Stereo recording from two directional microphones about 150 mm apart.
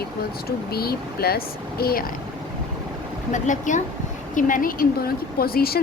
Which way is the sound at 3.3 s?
55° left (ahead or behind).